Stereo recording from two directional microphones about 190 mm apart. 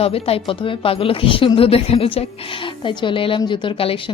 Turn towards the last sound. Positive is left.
turn(degrees=30)  # may be behind; listen again after turning